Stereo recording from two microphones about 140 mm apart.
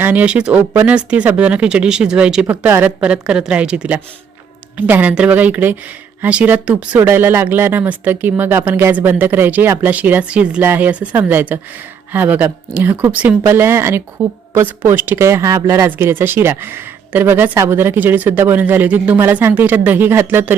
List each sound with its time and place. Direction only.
0.0 s speech: 10° right (ahead or behind)